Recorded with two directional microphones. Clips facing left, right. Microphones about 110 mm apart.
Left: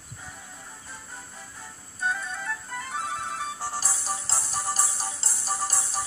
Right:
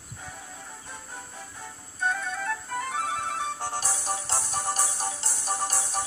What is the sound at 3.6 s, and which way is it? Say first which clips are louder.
Music: right 1 dB; 55° right (ahead or behind).